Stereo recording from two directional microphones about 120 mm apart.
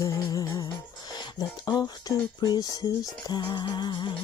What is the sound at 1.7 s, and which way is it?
Music, 35° left (ahead or behind).